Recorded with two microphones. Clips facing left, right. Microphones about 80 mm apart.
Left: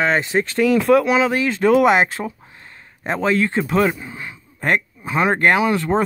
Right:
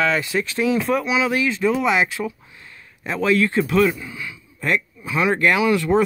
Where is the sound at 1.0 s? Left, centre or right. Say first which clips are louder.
Left 3 dB; left.